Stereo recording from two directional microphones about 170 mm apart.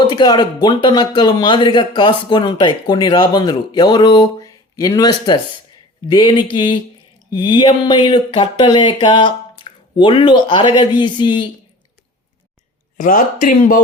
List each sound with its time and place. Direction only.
0.1 s speech: 25° left (ahead or behind)
13.0 s speech: 50° left (ahead or behind)